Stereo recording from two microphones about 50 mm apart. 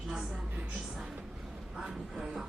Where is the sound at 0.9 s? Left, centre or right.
Centre.